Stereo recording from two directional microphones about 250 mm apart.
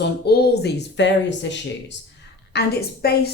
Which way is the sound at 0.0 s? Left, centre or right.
Left.